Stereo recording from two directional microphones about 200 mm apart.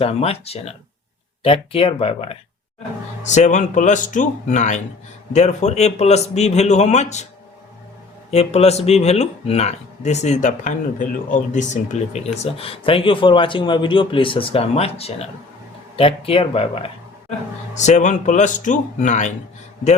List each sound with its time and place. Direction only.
0.0 s speech: 30° left (ahead or behind)
8.3 s speech: 30° left (ahead or behind)